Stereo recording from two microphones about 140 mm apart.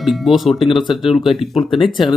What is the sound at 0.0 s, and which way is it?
Speech, centre (ahead or behind).